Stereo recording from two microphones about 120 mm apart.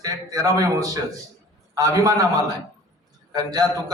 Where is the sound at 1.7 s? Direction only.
30° right (ahead or behind).